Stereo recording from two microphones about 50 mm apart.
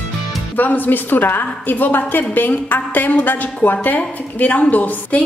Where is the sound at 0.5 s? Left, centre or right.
Left.